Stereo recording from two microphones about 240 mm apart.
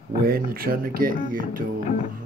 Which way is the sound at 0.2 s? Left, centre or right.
Right.